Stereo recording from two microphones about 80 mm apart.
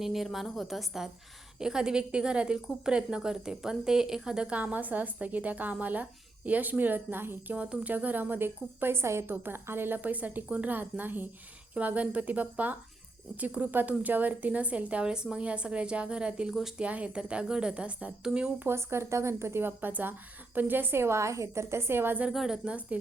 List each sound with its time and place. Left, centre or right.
0.0 s a woman's voice: centre
18.6 s a woman's voice: right
22.3 s a woman's voice: centre